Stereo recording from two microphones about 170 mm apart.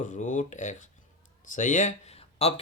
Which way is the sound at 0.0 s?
50° left (ahead or behind).